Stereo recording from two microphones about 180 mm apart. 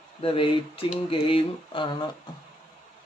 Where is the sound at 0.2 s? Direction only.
30° left (ahead or behind).